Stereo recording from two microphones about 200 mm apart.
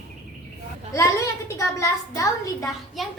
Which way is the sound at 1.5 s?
15° left (ahead or behind).